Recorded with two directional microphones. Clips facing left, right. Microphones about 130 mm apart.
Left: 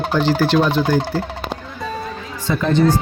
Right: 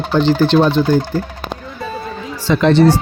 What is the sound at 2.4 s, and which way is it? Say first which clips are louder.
Speech: right 5 dB; 90° right.